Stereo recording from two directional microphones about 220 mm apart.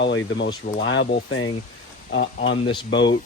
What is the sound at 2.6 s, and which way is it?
Speech, 20° left (ahead or behind).